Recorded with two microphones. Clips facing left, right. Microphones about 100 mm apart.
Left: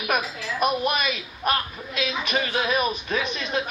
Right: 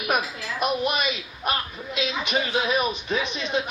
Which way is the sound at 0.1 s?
20° right (ahead or behind).